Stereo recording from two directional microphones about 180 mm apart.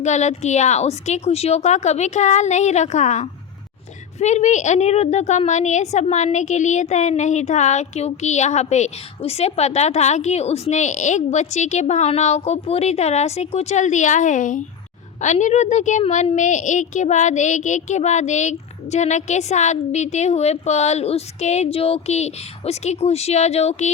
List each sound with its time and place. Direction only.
0.0 s a woman's voice: 40° left (ahead or behind)